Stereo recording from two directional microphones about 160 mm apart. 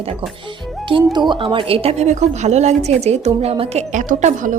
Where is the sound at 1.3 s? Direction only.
30° right (ahead or behind).